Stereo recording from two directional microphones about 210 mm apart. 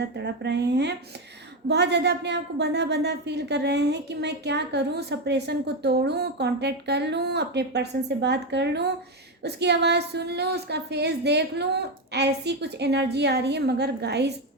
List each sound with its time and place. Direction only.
0.2 s a woman's voice: 55° right (ahead or behind)